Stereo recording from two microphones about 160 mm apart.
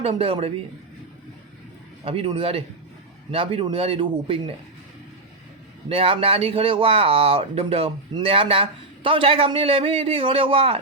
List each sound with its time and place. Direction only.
0.0 s speech: 35° right (ahead or behind)
2.0 s speech: 35° right (ahead or behind)
5.9 s speech: 35° right (ahead or behind)